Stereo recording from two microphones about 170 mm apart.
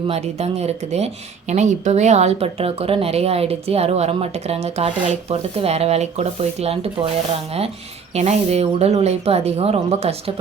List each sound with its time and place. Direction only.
0.1 s speech: 40° right (ahead or behind)
8.1 s speech: 40° right (ahead or behind)